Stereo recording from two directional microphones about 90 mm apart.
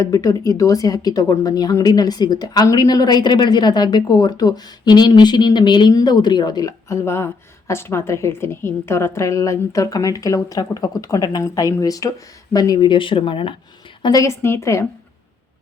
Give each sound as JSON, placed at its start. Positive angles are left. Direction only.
{"t": 0.0, "sound": "a woman's voice", "side_deg": 40}
{"t": 12.9, "sound": "speech", "side_deg": 70}
{"t": 14.2, "sound": "a woman's voice", "side_deg": 30}